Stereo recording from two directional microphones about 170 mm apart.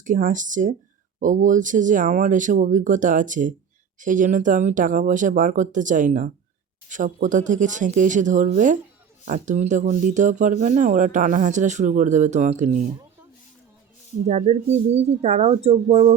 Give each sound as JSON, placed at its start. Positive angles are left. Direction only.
{"t": 0.0, "sound": "speech", "side_deg": -50}
{"t": 14.3, "sound": "speech", "side_deg": -40}